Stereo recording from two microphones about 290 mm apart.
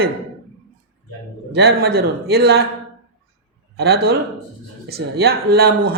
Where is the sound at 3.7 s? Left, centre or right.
Right.